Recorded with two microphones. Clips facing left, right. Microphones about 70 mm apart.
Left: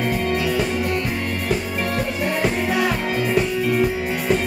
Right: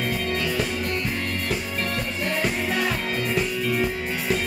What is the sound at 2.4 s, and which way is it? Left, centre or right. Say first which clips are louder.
Music: left 5 dB; centre.